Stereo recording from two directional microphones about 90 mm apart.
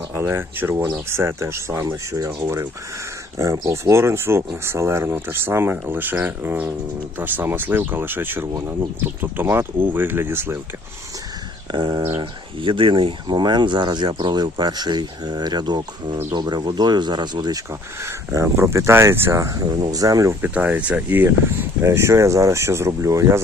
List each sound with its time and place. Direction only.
0.1 s speech: 25° right (ahead or behind)
8.5 s speech: 40° right (ahead or behind)
9.0 s speech: 20° right (ahead or behind)
11.7 s speech: 55° right (ahead or behind)
12.0 s speech: 75° right (ahead or behind); by 17.6 s 55° right (ahead or behind)
18.0 s speech: 35° right (ahead or behind)
20.4 s speech: 15° right (ahead or behind); by 23.4 s 35° right (ahead or behind)